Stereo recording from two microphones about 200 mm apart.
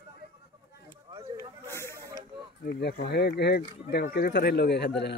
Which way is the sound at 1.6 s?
15° left (ahead or behind).